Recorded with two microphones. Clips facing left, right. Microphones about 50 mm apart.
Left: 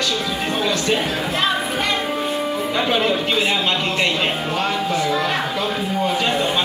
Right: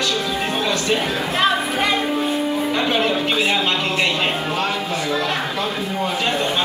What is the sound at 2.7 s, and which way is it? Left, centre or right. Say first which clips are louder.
Music: left 2 dB; centre.